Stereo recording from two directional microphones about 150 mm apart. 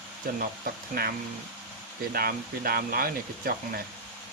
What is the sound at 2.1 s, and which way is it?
Speech, 85° right.